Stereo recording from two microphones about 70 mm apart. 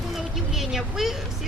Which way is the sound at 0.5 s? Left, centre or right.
Centre.